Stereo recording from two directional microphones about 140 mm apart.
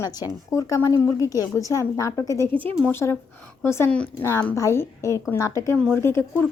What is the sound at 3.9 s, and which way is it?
Speech, 10° left (ahead or behind).